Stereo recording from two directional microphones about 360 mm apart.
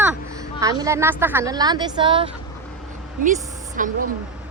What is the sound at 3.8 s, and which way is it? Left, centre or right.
Speech, right.